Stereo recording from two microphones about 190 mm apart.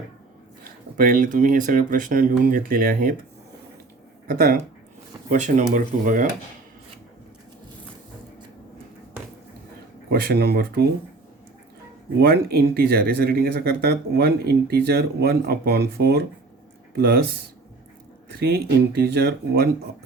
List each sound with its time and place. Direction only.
0.9 s speech: 45° right (ahead or behind)
4.3 s speech: 50° right (ahead or behind)
10.1 s speech: 60° right (ahead or behind)
12.2 s speech: 55° right (ahead or behind)
18.3 s speech: 55° right (ahead or behind)